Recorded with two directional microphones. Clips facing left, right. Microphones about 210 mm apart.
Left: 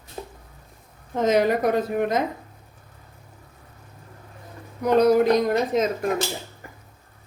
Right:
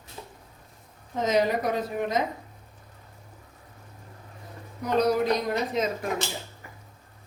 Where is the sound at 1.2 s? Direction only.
55° left (ahead or behind).